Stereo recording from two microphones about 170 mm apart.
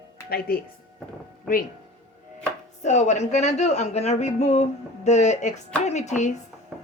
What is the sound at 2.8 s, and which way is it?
Speech, 45° left (ahead or behind).